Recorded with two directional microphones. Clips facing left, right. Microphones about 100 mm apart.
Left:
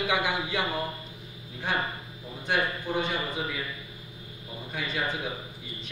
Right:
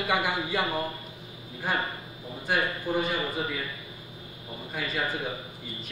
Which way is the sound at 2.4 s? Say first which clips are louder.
Even; 5° right (ahead or behind).